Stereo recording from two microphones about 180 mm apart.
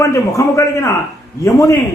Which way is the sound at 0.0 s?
15° left (ahead or behind).